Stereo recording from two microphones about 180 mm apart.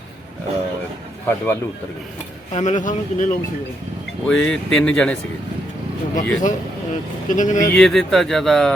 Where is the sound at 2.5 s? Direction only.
45° left (ahead or behind).